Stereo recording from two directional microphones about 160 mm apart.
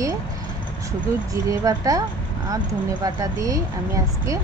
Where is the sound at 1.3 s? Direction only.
20° right (ahead or behind).